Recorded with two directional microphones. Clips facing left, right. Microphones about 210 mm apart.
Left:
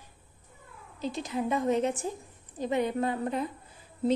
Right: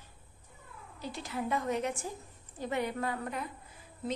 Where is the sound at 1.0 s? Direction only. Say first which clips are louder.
Left 6 dB; 20° left (ahead or behind).